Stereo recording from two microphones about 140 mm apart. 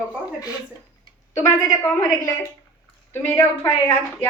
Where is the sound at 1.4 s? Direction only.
20° left (ahead or behind).